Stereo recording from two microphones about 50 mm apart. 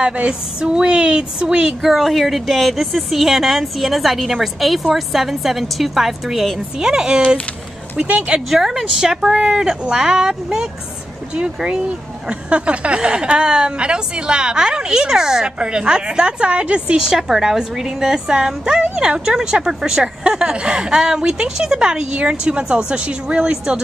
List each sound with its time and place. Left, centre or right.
0.0 s speech: centre
1.8 s speech: centre; by 8.4 s right
8.5 s a woman's voice: centre